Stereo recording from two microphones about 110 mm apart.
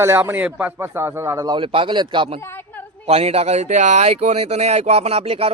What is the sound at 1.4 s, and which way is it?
Speech, 50° right (ahead or behind).